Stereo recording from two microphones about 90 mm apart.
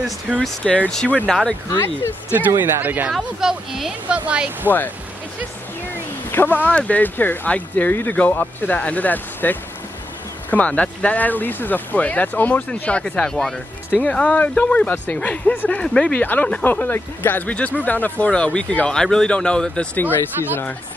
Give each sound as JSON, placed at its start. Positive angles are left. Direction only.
{"t": 0.3, "sound": "speech", "side_deg": 0}
{"t": 0.7, "sound": "speech", "side_deg": 10}
{"t": 2.5, "sound": "speech", "side_deg": -25}
{"t": 3.1, "sound": "speech", "side_deg": -5}
{"t": 4.6, "sound": "speech", "side_deg": 20}
{"t": 6.3, "sound": "speech", "side_deg": 20}